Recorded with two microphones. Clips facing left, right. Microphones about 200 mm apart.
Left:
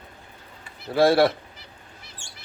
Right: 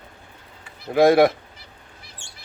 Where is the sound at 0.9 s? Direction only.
15° right (ahead or behind).